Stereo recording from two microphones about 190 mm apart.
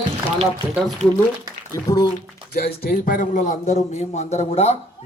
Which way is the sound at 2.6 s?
50° left (ahead or behind).